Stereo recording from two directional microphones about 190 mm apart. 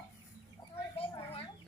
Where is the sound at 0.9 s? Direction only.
30° left (ahead or behind).